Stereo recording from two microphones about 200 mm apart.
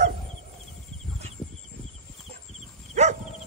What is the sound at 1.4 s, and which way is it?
Horse, 5° left (ahead or behind).